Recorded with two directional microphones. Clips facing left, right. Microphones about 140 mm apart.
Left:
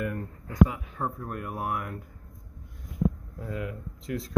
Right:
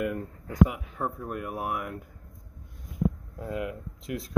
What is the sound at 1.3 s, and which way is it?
Speech, 10° right (ahead or behind).